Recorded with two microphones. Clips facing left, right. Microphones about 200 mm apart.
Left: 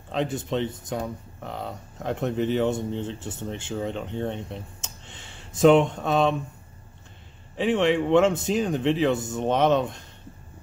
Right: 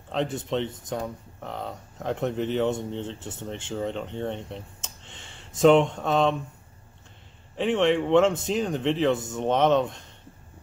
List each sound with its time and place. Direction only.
0.1 s speech: 10° left (ahead or behind)
7.5 s speech: 5° left (ahead or behind)